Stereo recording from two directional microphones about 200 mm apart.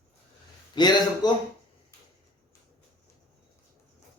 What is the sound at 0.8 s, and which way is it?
Speech, 20° left (ahead or behind).